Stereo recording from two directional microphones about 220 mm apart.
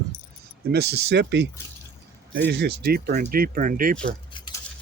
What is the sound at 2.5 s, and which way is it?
Speech, 50° right (ahead or behind).